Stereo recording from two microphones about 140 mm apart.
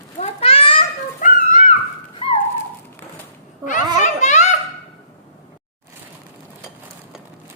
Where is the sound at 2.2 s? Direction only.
40° left (ahead or behind).